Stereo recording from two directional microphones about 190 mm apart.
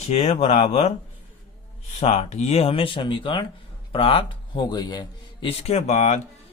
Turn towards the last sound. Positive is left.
turn(degrees=35)  # may be behind; listen again after turning